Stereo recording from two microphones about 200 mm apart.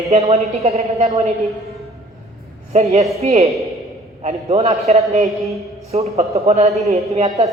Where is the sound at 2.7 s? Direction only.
30° right (ahead or behind).